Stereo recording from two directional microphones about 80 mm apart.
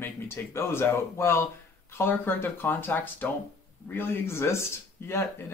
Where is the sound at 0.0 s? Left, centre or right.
Left.